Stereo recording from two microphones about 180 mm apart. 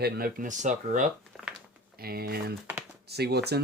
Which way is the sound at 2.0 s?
60° right (ahead or behind).